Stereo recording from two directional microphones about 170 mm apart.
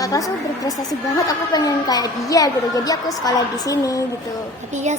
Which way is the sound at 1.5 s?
25° left (ahead or behind).